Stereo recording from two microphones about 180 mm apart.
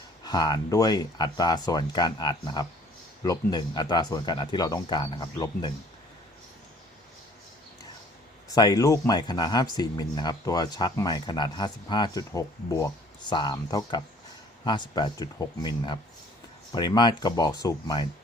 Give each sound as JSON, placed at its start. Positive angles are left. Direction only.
{"t": 0.3, "sound": "speech", "side_deg": 25}
{"t": 8.5, "sound": "speech", "side_deg": 20}